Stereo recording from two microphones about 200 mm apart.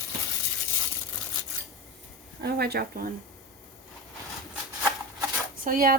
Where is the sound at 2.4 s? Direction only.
55° right (ahead or behind).